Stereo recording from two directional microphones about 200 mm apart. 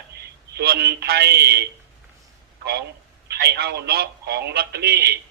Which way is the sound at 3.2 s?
55° right (ahead or behind).